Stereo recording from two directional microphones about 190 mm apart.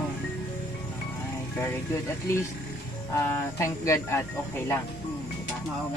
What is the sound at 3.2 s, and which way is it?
Speech, 15° left (ahead or behind).